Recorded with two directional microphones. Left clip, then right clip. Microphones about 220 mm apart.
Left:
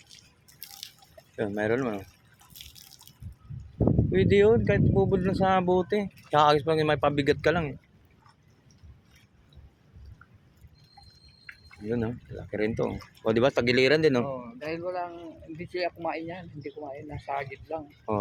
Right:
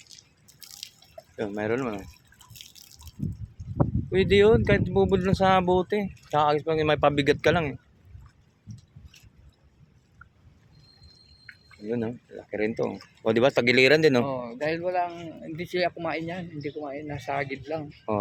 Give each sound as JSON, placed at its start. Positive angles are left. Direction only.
{"t": 0.2, "sound": "drip", "side_deg": -10}
{"t": 1.4, "sound": "speech", "side_deg": 0}
{"t": 2.5, "sound": "drip", "side_deg": -10}
{"t": 4.1, "sound": "speech", "side_deg": -10}
{"t": 6.8, "sound": "speech", "side_deg": -10}
{"t": 11.9, "sound": "speech", "side_deg": 0}
{"t": 14.3, "sound": "speech", "side_deg": -40}